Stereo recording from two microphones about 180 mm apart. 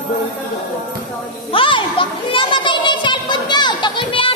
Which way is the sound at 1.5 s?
30° left (ahead or behind).